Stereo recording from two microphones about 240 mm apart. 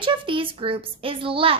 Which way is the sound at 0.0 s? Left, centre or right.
Right.